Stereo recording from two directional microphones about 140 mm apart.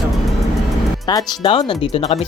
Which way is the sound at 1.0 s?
30° left (ahead or behind).